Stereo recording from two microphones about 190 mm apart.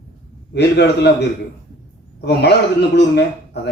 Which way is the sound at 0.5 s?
60° left (ahead or behind).